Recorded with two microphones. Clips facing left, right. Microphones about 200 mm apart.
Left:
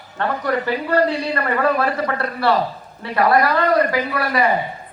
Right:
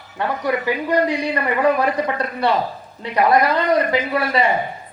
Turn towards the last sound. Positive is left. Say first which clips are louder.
# even
turn(degrees=-25)  # may be behind; listen again after turning